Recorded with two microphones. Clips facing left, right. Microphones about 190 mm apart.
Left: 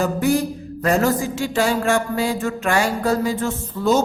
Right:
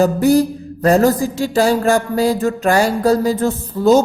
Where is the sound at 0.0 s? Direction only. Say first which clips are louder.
Right 6 dB; 35° right (ahead or behind).